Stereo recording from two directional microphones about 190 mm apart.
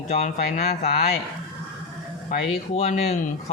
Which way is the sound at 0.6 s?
55° left (ahead or behind).